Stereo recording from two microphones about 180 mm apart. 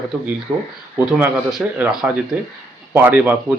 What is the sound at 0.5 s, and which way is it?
Speech, 5° right (ahead or behind).